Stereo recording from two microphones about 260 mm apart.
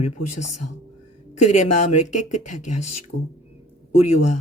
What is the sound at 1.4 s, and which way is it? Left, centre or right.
A woman's voice, left.